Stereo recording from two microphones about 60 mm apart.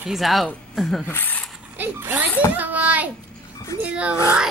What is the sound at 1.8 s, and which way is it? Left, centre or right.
A child's voice, right.